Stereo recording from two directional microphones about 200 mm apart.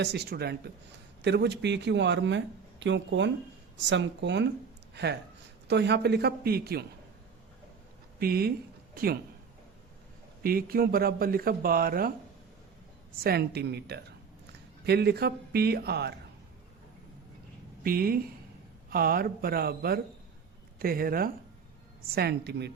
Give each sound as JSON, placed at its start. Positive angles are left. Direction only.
{"t": 0.0, "sound": "speech", "side_deg": -55}
{"t": 5.6, "sound": "speech", "side_deg": -60}
{"t": 8.2, "sound": "speech", "side_deg": -50}
{"t": 10.4, "sound": "speech", "side_deg": -50}
{"t": 13.2, "sound": "speech", "side_deg": -55}
{"t": 17.8, "sound": "speech", "side_deg": -50}